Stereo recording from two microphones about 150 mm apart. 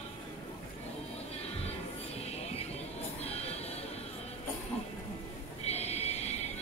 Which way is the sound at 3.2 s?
45° left (ahead or behind).